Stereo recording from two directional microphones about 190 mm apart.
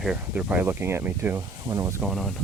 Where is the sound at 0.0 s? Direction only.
5° right (ahead or behind).